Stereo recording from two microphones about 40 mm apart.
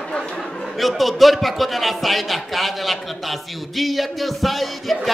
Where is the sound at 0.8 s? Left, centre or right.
Centre.